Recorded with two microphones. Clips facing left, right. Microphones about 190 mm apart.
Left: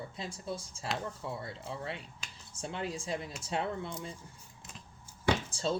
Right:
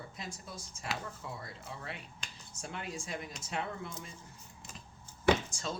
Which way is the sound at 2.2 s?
5° left (ahead or behind).